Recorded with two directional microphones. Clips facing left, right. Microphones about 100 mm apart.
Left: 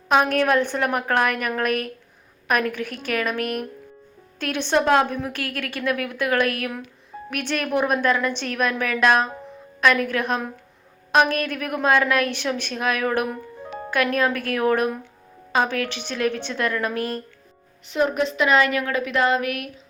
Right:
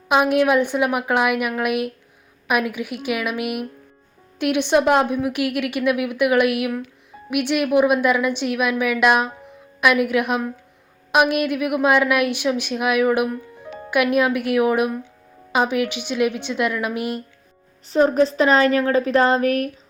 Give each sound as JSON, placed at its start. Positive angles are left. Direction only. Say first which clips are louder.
{"t": 0.1, "sound": "a woman's voice", "louder": "right 2 dB", "side_deg": -10}
{"t": 17.8, "sound": "a woman's voice", "louder": "right 5 dB", "side_deg": -35}